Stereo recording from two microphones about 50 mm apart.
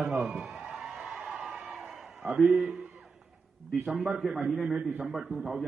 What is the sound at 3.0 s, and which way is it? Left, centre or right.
Music, centre.